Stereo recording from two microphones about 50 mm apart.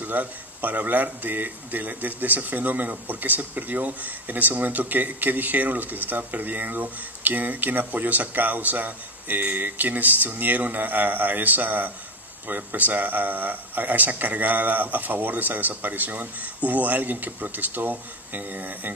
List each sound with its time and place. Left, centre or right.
0.0 s speech: right